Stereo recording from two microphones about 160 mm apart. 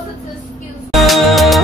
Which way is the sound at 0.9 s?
Centre (ahead or behind).